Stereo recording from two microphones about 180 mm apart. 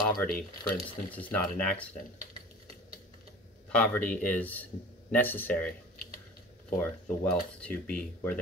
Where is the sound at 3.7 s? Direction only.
5° left (ahead or behind).